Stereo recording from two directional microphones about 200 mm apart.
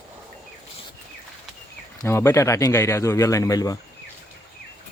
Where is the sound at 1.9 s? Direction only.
15° left (ahead or behind).